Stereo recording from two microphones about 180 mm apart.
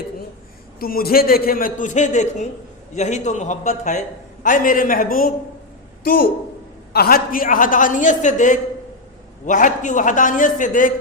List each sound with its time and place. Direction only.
0.8 s a man's voice: 55° left (ahead or behind)
6.9 s a man's voice: 55° left (ahead or behind)